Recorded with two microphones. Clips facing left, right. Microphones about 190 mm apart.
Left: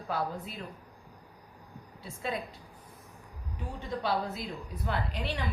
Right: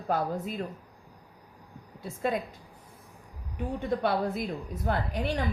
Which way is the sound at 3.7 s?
55° right (ahead or behind).